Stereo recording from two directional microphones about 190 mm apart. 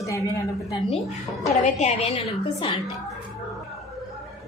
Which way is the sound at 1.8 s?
35° left (ahead or behind).